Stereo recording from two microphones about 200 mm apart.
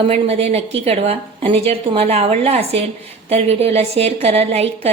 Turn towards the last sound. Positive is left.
turn(degrees=-30)  # may be behind; listen again after turning